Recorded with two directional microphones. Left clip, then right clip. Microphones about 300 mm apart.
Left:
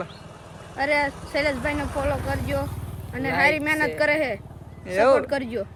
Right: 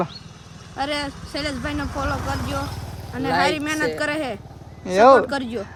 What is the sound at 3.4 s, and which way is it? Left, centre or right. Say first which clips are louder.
Speech: left 1 dB; centre.